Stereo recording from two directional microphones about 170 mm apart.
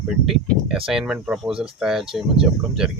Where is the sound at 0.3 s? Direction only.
5° right (ahead or behind).